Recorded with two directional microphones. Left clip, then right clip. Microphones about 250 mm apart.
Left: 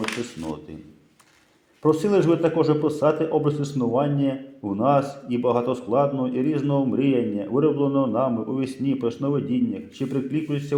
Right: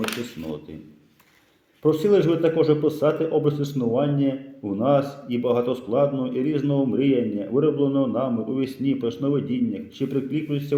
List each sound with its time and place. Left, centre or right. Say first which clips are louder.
2.0 s a man's voice: right 3 dB; centre